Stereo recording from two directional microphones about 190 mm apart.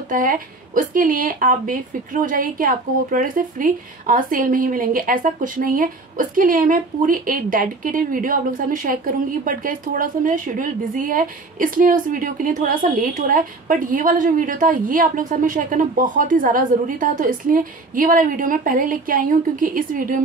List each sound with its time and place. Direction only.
0.1 s speech: 45° right (ahead or behind)